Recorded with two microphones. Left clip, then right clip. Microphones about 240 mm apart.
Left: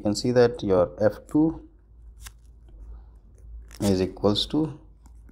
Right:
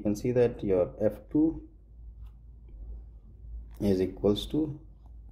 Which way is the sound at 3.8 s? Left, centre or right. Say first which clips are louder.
Left 3 dB; centre.